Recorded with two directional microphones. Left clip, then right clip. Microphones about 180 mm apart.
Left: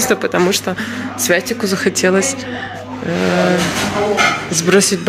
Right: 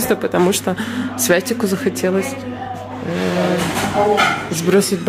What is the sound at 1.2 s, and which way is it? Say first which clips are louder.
Speech: left 1 dB; 25° right (ahead or behind).